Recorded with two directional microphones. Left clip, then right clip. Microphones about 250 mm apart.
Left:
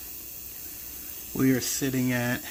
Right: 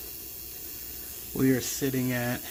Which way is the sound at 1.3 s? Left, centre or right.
Centre.